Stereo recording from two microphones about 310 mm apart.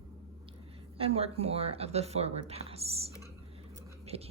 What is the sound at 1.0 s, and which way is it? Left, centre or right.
Speech, centre.